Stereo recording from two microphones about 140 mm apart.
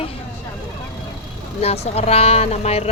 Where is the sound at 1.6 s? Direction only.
45° left (ahead or behind).